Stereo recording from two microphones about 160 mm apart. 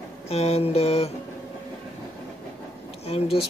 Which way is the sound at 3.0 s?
40° left (ahead or behind).